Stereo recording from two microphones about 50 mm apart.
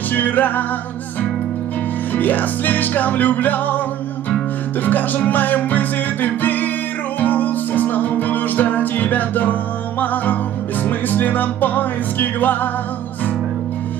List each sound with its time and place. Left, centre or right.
0.1 s music: left
2.1 s music: left
4.8 s music: left